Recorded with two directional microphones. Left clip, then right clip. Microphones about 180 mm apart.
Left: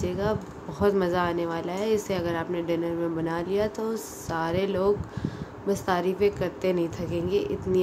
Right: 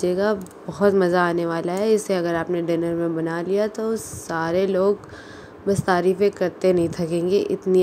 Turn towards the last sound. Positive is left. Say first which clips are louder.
# right 6 dB
turn(degrees=-30)  # may be behind; listen again after turning